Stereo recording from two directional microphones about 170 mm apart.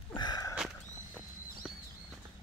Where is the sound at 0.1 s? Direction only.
25° left (ahead or behind).